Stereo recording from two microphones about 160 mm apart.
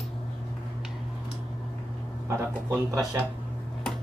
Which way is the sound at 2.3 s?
15° right (ahead or behind).